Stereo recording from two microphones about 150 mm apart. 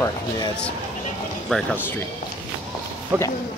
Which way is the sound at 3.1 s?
15° right (ahead or behind).